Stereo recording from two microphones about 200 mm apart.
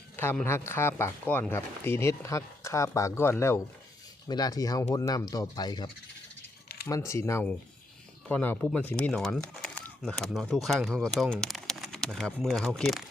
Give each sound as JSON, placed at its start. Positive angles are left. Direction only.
{"t": 0.2, "sound": "speech", "side_deg": 10}